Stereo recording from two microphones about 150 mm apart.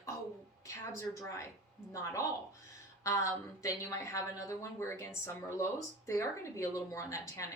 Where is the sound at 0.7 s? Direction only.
20° left (ahead or behind).